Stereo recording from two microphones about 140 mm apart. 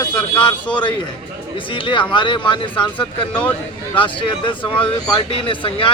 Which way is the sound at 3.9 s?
35° left (ahead or behind).